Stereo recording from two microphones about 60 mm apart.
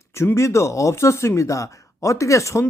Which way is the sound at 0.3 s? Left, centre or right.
Left.